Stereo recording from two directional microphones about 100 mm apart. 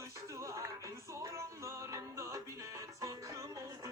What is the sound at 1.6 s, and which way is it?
Music, 30° right (ahead or behind).